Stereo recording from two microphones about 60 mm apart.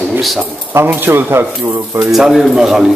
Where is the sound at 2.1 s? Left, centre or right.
Centre.